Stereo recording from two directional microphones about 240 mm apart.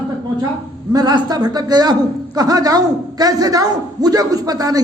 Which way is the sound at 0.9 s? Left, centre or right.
Centre.